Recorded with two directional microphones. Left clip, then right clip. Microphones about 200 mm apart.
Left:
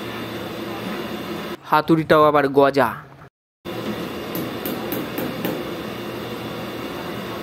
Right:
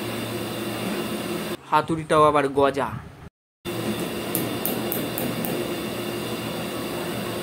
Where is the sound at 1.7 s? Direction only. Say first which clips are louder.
Left 5 dB; 30° left (ahead or behind).